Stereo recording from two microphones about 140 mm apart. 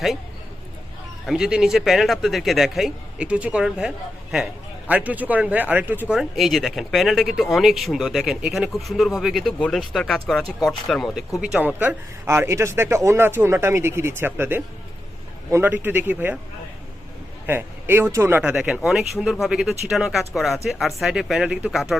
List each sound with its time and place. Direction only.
1.3 s speech: 5° right (ahead or behind)
6.1 s speech: centre (ahead or behind)
17.4 s speech: 15° right (ahead or behind)